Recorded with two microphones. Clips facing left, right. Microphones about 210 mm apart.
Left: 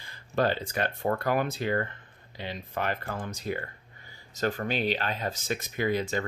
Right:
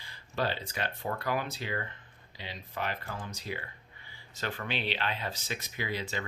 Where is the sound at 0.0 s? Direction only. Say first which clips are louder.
Left 6 dB; 50° left (ahead or behind).